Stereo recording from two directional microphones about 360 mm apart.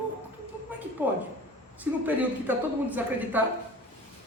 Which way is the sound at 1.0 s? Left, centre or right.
Centre.